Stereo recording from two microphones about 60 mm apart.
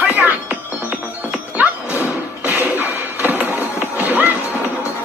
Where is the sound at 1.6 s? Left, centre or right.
Right.